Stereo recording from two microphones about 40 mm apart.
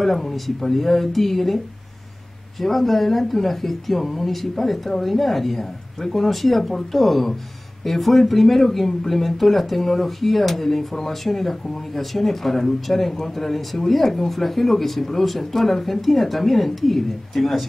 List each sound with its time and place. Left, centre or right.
0.0 s speech: centre
2.6 s speech: centre